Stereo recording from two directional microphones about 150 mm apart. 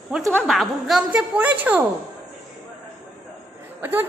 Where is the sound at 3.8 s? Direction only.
10° right (ahead or behind).